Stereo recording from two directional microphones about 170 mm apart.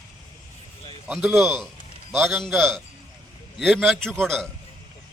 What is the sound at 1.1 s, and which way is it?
Speech, centre (ahead or behind).